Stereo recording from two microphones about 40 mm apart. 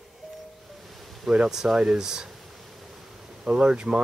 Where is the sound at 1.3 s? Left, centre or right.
Centre.